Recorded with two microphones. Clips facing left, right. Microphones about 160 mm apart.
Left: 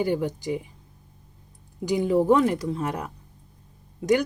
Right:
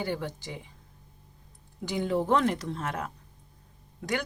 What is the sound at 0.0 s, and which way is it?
Speech, 10° left (ahead or behind).